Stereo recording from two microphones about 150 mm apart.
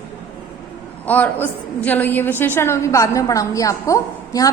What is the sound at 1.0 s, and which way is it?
A woman's voice, 10° left (ahead or behind).